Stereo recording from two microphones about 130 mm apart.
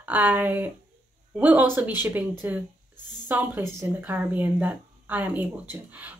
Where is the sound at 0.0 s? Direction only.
15° right (ahead or behind).